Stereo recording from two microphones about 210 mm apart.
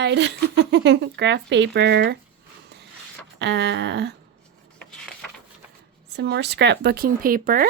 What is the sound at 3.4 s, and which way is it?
Speech, 55° right (ahead or behind).